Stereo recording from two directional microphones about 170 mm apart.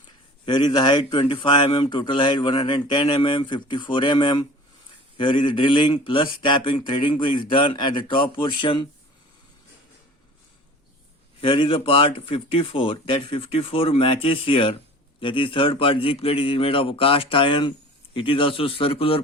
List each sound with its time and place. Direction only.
0.4 s a man's voice: 25° left (ahead or behind)
11.3 s speech: 30° left (ahead or behind)